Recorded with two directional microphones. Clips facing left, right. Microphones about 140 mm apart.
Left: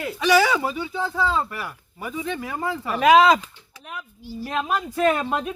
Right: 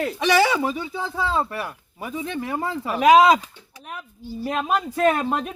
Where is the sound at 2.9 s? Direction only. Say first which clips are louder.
Right 1 dB; 10° right (ahead or behind).